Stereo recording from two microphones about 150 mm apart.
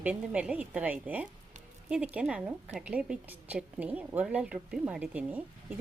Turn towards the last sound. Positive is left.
turn(degrees=-10)  # may be behind; listen again after turning